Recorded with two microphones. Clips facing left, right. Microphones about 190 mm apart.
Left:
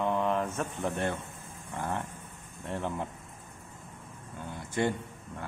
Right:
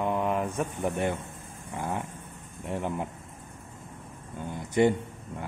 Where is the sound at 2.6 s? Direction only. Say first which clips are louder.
Right 3 dB; 15° right (ahead or behind).